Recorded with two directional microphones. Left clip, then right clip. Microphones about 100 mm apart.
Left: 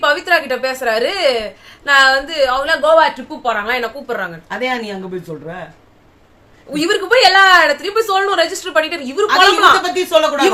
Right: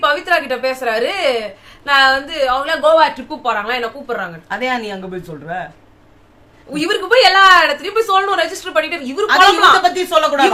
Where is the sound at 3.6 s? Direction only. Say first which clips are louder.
Left 1 dB; 35° left (ahead or behind).